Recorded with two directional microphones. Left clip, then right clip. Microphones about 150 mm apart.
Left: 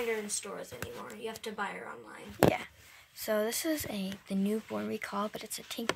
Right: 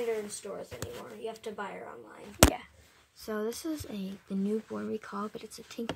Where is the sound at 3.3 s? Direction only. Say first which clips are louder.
Left 4 dB; 10° left (ahead or behind).